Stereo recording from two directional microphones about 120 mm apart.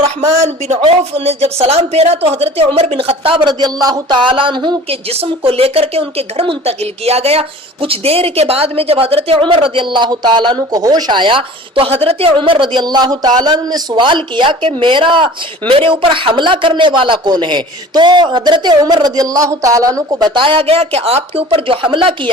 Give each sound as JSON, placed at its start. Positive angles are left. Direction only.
{"t": 0.2, "sound": "speech", "side_deg": -70}
{"t": 0.9, "sound": "speech", "side_deg": -55}
{"t": 5.0, "sound": "speech", "side_deg": -55}